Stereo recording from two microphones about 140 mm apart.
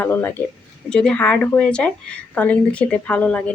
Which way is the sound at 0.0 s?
15° left (ahead or behind).